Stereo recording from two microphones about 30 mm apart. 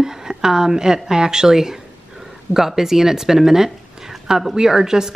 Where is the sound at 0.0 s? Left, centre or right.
Right.